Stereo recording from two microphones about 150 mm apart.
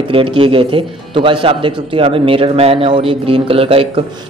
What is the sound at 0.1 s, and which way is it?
A man's voice, 35° right (ahead or behind).